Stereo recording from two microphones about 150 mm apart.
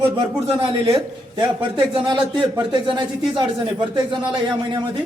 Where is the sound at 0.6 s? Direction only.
35° right (ahead or behind).